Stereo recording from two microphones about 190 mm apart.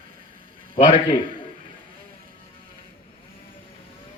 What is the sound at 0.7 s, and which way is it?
Speech, 25° left (ahead or behind).